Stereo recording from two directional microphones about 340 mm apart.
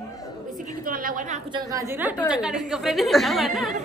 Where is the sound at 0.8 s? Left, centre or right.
Right.